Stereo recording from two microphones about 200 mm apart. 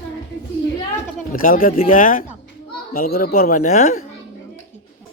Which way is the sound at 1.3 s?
45° left (ahead or behind).